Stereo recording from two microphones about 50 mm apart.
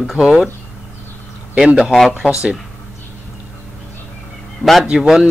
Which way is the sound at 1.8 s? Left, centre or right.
Centre.